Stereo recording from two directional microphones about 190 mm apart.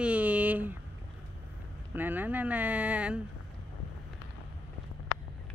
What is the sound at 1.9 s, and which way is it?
Speech, 10° right (ahead or behind).